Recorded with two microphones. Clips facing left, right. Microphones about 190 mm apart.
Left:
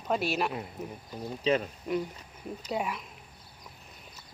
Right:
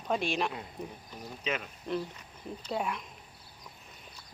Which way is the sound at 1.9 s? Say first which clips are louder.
Left 3 dB; 10° left (ahead or behind).